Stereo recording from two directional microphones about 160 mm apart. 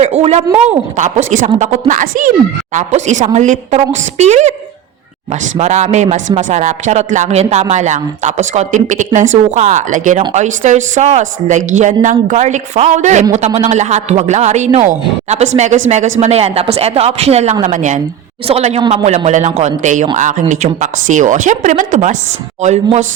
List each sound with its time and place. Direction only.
0.0 s speech: 45° right (ahead or behind)